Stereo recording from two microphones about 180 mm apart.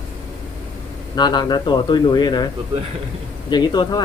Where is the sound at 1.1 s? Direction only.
25° left (ahead or behind).